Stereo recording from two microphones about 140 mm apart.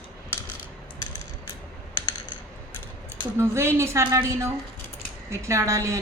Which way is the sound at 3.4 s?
20° right (ahead or behind).